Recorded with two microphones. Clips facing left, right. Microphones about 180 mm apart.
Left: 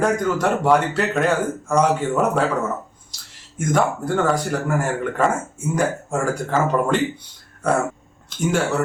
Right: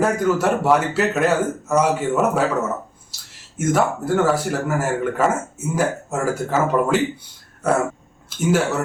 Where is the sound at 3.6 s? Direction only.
5° right (ahead or behind).